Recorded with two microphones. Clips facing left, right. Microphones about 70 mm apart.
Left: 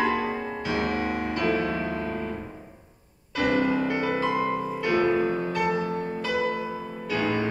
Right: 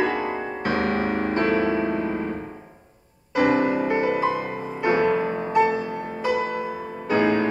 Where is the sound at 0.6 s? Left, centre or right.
Right.